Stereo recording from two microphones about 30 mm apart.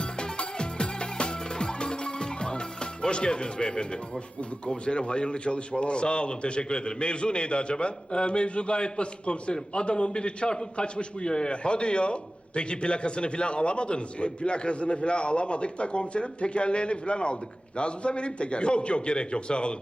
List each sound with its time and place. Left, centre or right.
0.0 s music: left
4.7 s a man's voice: left